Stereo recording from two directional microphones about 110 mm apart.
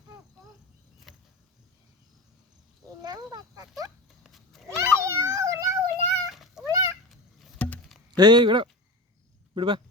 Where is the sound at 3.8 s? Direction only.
Centre (ahead or behind).